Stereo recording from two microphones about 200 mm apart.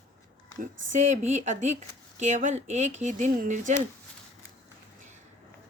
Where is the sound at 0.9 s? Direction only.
35° right (ahead or behind).